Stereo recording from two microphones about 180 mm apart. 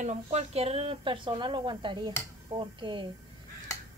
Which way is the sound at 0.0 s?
35° right (ahead or behind).